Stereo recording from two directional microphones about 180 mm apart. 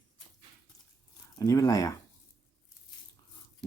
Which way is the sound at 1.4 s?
20° left (ahead or behind).